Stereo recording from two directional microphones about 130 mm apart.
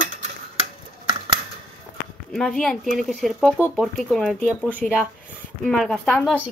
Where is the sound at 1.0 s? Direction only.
35° right (ahead or behind).